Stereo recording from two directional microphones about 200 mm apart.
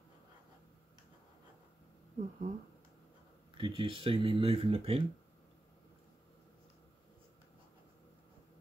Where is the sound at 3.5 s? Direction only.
25° right (ahead or behind).